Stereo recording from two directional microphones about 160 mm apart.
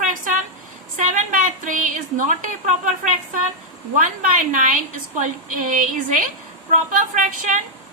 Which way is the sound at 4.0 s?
55° right (ahead or behind).